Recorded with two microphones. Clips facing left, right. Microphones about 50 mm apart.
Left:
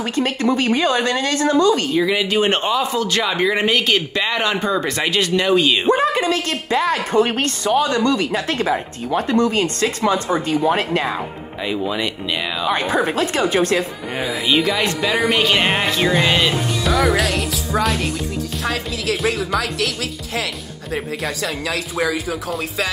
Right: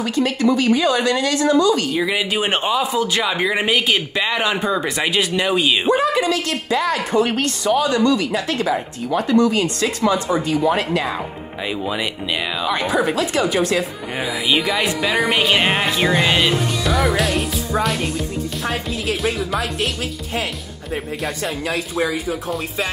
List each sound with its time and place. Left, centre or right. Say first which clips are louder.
0.0 s a woman's voice: right 1 dB; left
2.0 s a man's voice: left 3 dB; centre
5.9 s a woman's voice: even; left
11.6 s speech: left 1 dB; centre
12.7 s a woman's voice: even; left
14.1 s speech: left 1 dB; centre
17.0 s music: left 1 dB; left